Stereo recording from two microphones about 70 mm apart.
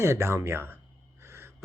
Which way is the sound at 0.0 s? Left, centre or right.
Right.